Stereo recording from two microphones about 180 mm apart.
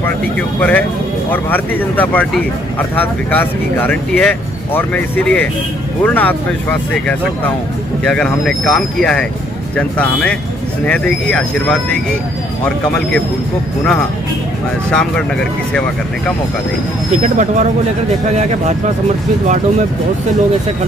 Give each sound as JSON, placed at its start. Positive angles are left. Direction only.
{"t": 0.4, "sound": "speech", "side_deg": 10}
{"t": 14.9, "sound": "speech", "side_deg": 5}
{"t": 17.2, "sound": "speech", "side_deg": -40}